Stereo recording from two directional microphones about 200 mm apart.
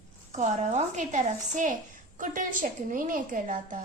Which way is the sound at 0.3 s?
35° right (ahead or behind).